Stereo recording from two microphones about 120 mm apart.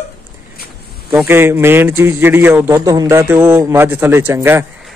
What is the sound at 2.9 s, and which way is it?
Speech, 30° right (ahead or behind).